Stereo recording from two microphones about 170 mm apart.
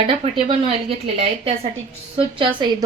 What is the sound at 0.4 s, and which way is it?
A woman's voice, 35° right (ahead or behind).